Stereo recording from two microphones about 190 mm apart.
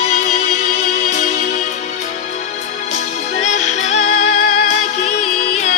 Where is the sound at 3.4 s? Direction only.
40° left (ahead or behind).